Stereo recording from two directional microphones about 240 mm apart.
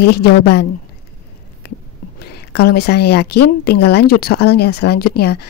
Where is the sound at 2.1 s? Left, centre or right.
Left.